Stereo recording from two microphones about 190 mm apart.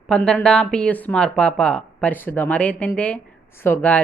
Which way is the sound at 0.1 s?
5° left (ahead or behind).